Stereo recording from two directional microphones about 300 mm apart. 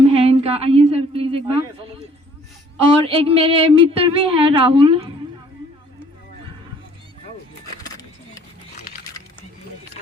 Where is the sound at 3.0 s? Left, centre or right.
Centre.